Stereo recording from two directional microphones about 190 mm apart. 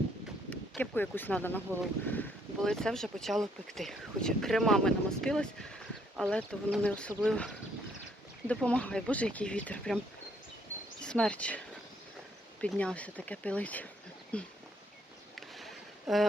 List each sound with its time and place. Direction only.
0.5 s speech: 10° left (ahead or behind)
11.0 s speech: 5° left (ahead or behind)
12.6 s speech: 5° left (ahead or behind)
15.4 s a sound: centre (ahead or behind)